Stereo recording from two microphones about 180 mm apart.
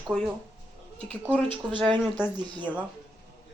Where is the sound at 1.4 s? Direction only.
30° right (ahead or behind).